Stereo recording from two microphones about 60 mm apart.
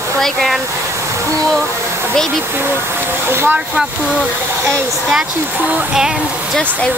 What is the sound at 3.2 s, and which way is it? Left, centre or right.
Speech, right.